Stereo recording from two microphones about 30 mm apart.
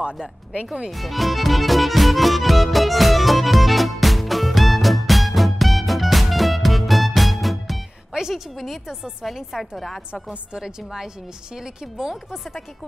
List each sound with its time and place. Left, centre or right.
0.8 s music: centre
8.1 s a sound: right
9.6 s a woman's voice: centre
11.5 s speech: centre